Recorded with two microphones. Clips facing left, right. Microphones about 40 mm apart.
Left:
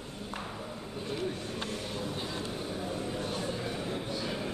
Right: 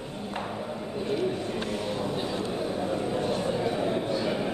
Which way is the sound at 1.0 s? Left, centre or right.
Right.